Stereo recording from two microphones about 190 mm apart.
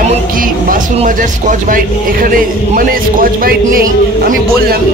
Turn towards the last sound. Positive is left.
turn(degrees=-50)  # may be behind; listen again after turning